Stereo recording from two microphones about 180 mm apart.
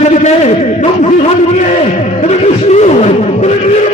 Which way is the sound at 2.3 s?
40° left (ahead or behind).